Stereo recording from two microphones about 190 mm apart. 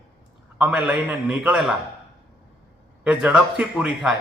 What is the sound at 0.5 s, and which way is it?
A man's voice, 5° right (ahead or behind).